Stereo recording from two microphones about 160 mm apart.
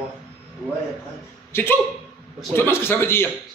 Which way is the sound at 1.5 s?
15° left (ahead or behind).